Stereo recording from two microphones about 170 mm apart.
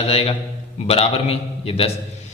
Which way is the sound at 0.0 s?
35° left (ahead or behind).